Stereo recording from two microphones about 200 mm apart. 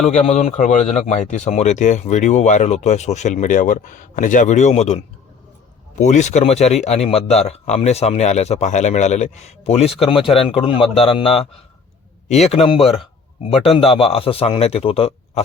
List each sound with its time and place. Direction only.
0.0 s a man's voice: 30° left (ahead or behind)